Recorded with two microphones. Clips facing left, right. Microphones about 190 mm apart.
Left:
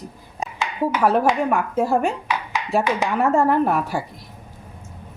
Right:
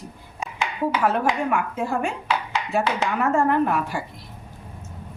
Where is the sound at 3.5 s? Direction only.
35° left (ahead or behind).